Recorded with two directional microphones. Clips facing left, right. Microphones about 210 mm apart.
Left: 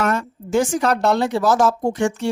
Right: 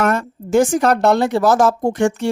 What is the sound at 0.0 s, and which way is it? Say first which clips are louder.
Speech: right 3 dB; 50° right (ahead or behind).